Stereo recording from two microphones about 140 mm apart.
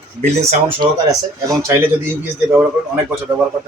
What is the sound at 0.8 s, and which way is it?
A man's voice, 25° right (ahead or behind).